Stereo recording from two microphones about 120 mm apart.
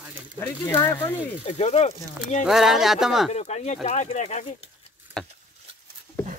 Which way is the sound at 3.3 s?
65° left (ahead or behind).